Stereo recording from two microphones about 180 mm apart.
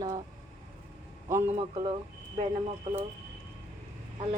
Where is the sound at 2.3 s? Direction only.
35° right (ahead or behind).